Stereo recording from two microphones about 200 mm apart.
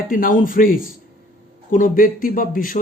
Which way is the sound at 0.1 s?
45° left (ahead or behind).